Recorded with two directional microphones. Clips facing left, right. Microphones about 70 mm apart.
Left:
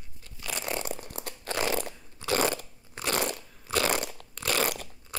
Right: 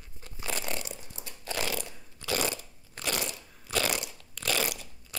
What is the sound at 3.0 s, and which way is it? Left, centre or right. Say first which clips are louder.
Crunch: left 3 dB; centre.